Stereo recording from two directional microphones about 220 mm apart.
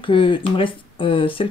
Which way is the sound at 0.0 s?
25° left (ahead or behind).